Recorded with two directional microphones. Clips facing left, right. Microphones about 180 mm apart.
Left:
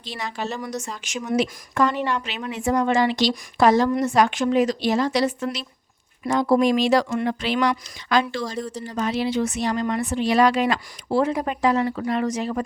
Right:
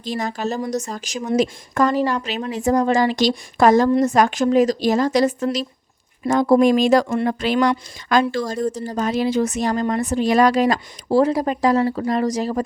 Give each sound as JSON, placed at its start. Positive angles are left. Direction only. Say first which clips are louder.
{"t": 0.0, "sound": "speech", "louder": "right 6 dB", "side_deg": -45}